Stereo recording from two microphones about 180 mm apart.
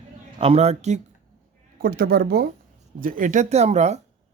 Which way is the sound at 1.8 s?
55° right (ahead or behind).